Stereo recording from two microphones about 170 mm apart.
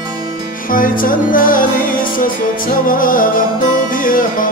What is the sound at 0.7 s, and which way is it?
Music, 55° left (ahead or behind).